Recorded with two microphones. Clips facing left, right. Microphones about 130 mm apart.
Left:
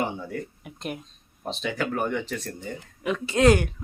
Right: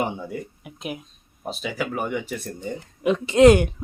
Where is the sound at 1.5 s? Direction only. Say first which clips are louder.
Even; 5° right (ahead or behind).